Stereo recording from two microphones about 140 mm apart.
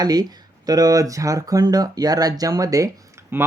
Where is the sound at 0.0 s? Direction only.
30° right (ahead or behind).